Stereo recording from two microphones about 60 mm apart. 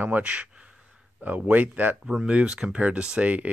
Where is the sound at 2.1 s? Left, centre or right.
Centre.